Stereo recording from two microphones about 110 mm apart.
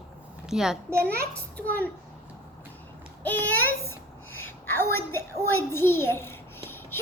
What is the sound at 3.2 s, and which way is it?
A child's voice, 15° left (ahead or behind).